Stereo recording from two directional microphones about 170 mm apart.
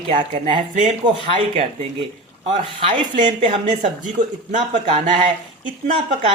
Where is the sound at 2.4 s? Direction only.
40° right (ahead or behind).